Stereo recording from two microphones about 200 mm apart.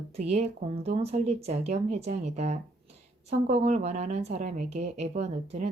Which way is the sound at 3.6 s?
35° right (ahead or behind).